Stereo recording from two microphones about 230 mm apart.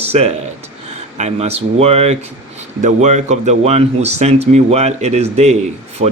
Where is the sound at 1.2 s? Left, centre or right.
Right.